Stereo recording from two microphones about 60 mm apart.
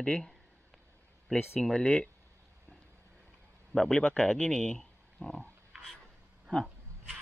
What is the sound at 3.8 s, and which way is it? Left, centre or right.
Speech, centre.